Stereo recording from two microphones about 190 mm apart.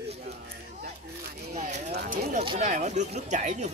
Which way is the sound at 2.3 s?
35° right (ahead or behind).